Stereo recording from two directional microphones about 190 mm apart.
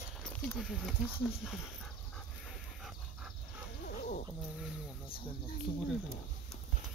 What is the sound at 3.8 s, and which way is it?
Wild animals, 50° left (ahead or behind).